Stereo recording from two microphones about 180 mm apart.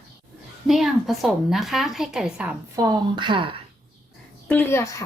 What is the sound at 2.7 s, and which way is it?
Speech, 20° right (ahead or behind).